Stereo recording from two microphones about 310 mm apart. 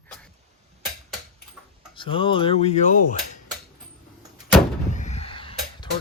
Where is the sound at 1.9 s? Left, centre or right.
Centre.